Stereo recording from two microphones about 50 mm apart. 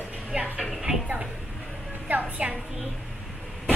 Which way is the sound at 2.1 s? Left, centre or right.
Right.